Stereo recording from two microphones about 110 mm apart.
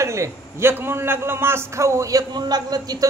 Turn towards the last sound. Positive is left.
turn(degrees=-35)  # may be behind; listen again after turning